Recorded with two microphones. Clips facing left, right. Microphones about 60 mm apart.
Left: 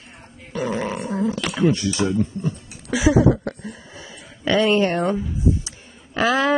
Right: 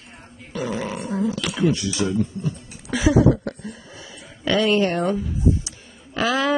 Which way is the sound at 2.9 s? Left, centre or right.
Centre.